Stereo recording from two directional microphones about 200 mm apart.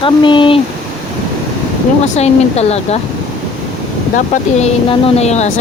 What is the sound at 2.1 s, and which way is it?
Speech, 30° left (ahead or behind).